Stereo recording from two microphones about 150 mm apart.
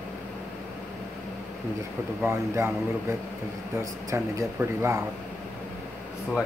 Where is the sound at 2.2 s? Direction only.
15° right (ahead or behind).